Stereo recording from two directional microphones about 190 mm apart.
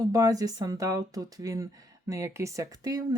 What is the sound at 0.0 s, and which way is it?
Speech, 20° right (ahead or behind).